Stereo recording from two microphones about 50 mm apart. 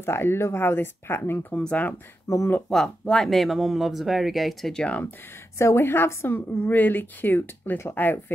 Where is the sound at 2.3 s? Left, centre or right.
Left.